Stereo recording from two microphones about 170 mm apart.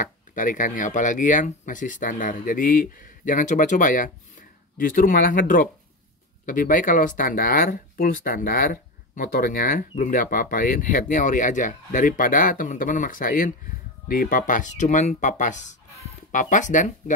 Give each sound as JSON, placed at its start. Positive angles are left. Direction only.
{"t": 0.0, "sound": "speech", "side_deg": 50}